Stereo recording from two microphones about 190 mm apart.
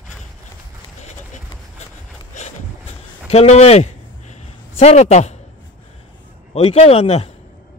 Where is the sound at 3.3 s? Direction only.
35° left (ahead or behind).